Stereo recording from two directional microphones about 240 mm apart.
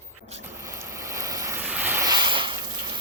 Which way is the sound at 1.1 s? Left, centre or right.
Centre.